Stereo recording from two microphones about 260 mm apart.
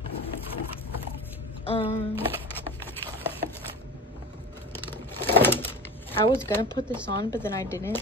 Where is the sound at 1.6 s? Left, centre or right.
Left.